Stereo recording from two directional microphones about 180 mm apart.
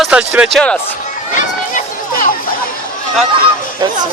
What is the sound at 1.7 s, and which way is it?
Children playing, 50° left (ahead or behind).